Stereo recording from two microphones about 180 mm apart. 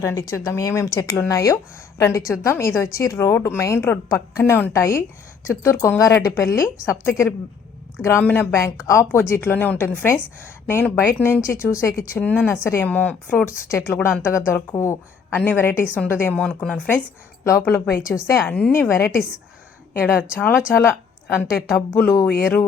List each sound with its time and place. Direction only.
0.0 s a woman's voice: 15° left (ahead or behind)
6.4 s speech: 55° left (ahead or behind)
6.8 s a woman's voice: 15° left (ahead or behind)
20.3 s a woman's voice: 10° left (ahead or behind)
21.9 s a woman's voice: 15° left (ahead or behind)
22.4 s music: centre (ahead or behind)